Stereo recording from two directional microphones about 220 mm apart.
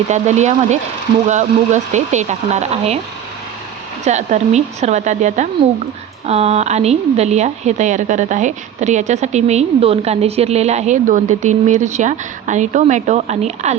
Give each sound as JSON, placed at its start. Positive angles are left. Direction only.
{"t": 0.1, "sound": "a woman's voice", "side_deg": -30}
{"t": 4.0, "sound": "a woman's voice", "side_deg": -30}